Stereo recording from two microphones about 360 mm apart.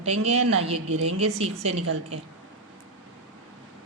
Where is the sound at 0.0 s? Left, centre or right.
Centre.